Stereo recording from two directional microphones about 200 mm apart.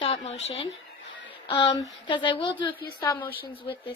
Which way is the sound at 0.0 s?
35° left (ahead or behind).